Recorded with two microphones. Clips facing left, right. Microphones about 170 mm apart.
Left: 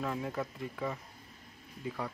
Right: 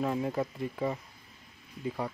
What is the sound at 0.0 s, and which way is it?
Speech, 25° right (ahead or behind).